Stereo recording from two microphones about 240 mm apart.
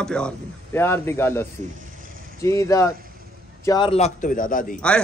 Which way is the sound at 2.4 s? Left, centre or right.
Centre.